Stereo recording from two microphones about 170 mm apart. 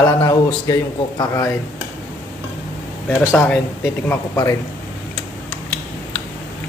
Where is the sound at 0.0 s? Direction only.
25° left (ahead or behind).